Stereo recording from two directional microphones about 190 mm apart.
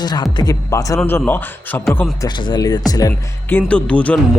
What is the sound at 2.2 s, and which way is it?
Speech, 25° left (ahead or behind).